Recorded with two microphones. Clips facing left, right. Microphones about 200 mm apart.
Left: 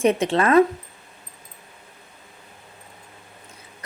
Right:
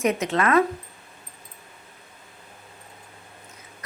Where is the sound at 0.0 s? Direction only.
30° left (ahead or behind).